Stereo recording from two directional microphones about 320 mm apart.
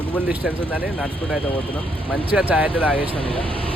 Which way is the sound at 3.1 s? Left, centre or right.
Centre.